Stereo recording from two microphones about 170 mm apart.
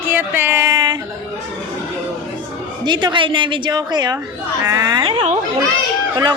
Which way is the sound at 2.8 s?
25° right (ahead or behind).